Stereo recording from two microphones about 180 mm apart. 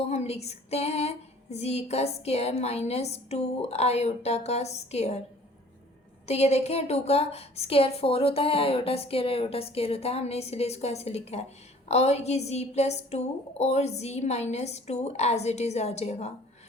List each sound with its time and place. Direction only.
0.0 s a woman's voice: 35° left (ahead or behind)
6.2 s a woman's voice: 35° left (ahead or behind)